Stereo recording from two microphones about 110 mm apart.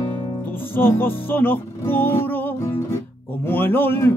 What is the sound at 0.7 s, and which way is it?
Music, 20° left (ahead or behind).